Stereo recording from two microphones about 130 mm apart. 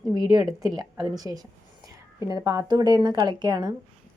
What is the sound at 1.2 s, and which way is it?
Speech, 30° right (ahead or behind).